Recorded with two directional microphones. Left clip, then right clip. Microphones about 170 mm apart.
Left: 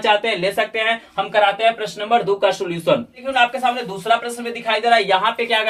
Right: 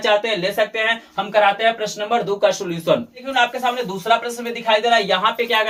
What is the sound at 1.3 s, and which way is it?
Speech, 25° left (ahead or behind).